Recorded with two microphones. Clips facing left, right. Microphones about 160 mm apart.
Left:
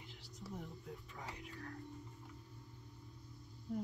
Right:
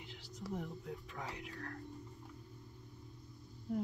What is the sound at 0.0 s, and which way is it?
Whispering, 90° right.